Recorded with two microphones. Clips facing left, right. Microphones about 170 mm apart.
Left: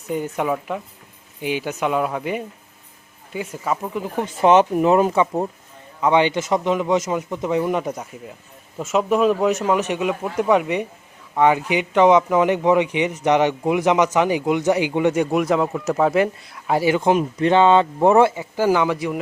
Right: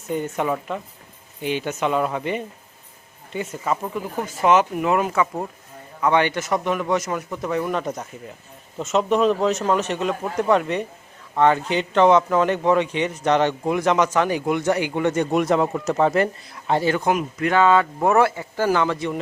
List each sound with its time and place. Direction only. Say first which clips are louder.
0.1 s a man's voice: left 1 dB; 5° left (ahead or behind)
3.9 s a man's voice: left 2 dB; 15° left (ahead or behind)
4.4 s a man's voice: left 4 dB; 30° left (ahead or behind); by 17.0 s 10° left (ahead or behind)
17.0 s speech: left 4 dB; 30° left (ahead or behind); by 19.2 s 10° left (ahead or behind)